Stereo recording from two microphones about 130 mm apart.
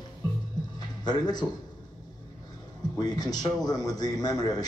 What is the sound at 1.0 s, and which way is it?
Speech, 35° left (ahead or behind).